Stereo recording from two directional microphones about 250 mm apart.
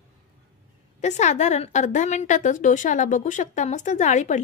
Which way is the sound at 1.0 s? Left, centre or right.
Left.